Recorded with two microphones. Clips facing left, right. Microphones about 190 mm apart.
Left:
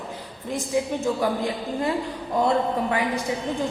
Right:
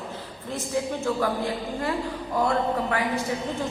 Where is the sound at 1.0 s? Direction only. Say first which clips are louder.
Left 2 dB; 15° left (ahead or behind).